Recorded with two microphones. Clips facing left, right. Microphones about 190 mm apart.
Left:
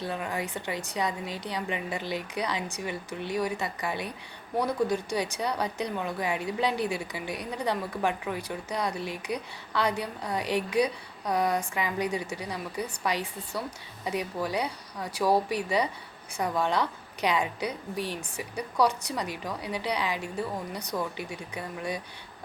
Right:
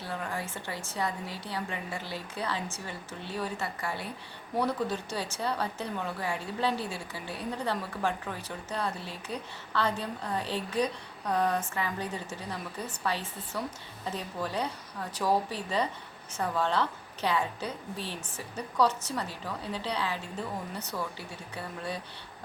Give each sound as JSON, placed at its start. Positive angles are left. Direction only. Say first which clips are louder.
{"t": 0.0, "sound": "a woman's voice", "louder": "left 4 dB", "side_deg": 20}